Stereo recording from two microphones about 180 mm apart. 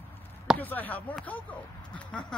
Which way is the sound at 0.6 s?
10° left (ahead or behind).